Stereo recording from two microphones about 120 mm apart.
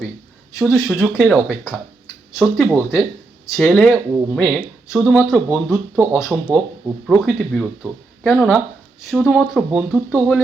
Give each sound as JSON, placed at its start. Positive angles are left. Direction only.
{"t": 0.6, "sound": "speech", "side_deg": -5}
{"t": 3.6, "sound": "speech", "side_deg": 10}
{"t": 3.9, "sound": "speech", "side_deg": -10}
{"t": 7.2, "sound": "speech", "side_deg": 0}